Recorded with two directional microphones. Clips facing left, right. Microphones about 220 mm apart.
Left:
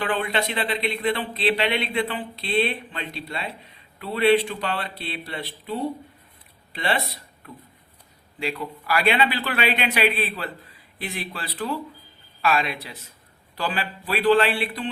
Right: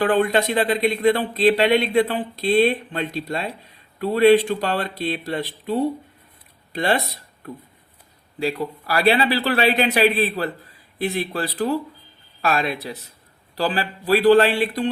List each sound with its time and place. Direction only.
0.0 s a man's voice: 45° right (ahead or behind)